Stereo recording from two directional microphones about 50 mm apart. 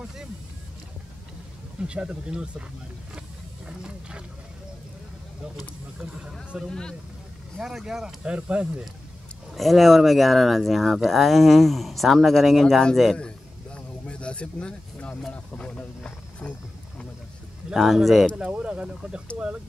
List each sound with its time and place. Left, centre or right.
1.8 s speech: right
6.7 s speech: centre
7.6 s speech: centre
8.2 s speech: right
9.5 s speech: centre
13.2 s a sound: left
15.3 s speech: left
17.7 s speech: centre
18.3 s speech: right